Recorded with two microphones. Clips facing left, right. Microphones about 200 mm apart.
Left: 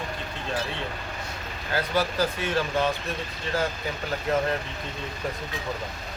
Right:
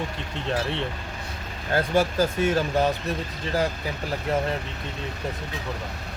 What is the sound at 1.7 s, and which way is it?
Speech, 50° right (ahead or behind).